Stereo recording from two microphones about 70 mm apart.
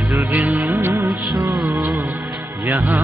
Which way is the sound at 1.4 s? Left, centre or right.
Right.